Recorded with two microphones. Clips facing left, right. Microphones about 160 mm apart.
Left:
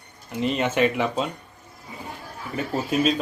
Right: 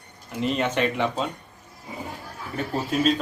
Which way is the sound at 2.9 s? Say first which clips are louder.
Even; 5° left (ahead or behind).